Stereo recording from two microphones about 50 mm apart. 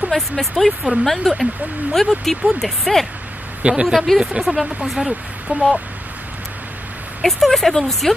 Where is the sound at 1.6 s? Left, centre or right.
Right.